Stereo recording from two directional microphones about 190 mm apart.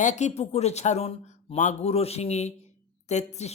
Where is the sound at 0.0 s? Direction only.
40° left (ahead or behind).